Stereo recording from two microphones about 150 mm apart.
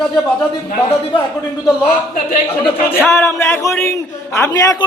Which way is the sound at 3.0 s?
15° left (ahead or behind).